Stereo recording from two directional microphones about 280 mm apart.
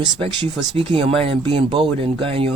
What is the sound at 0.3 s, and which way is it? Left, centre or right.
Speech, centre.